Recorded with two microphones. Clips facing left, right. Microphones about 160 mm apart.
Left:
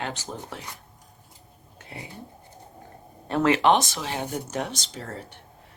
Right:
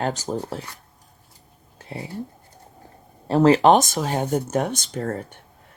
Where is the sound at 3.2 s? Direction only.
35° right (ahead or behind).